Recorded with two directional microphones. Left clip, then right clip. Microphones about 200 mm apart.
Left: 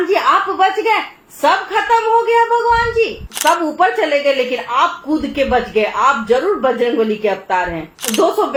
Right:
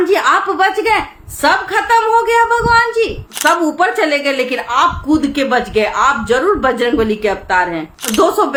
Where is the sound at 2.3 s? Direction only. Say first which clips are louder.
Right 1 dB; 20° right (ahead or behind).